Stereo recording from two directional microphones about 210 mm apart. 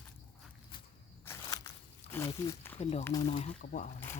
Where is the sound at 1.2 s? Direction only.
15° left (ahead or behind).